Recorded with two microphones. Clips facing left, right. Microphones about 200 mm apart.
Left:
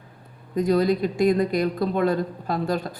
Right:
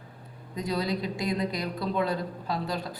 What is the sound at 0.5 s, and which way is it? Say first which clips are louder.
Speech: left 9 dB; 50° left (ahead or behind).